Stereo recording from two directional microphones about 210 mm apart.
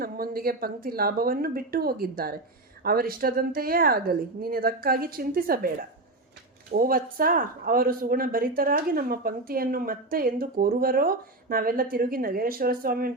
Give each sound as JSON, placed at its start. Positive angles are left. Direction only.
{"t": 0.0, "sound": "speech", "side_deg": -45}